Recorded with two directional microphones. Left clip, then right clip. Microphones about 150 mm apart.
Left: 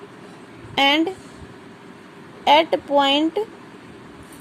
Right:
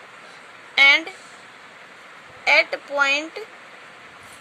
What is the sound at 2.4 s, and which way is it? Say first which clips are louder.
Speech: left 2 dB; 25° left (ahead or behind).